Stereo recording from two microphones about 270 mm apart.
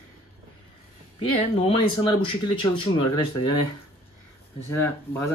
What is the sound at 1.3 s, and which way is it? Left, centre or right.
Speech, centre.